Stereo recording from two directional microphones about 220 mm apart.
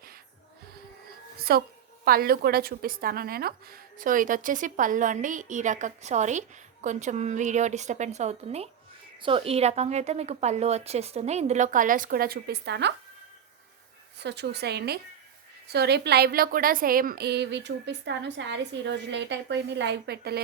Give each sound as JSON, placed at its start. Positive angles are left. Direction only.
{"t": 1.4, "sound": "music", "side_deg": -45}
{"t": 2.0, "sound": "a woman's voice", "side_deg": -45}
{"t": 14.2, "sound": "a woman's voice", "side_deg": -50}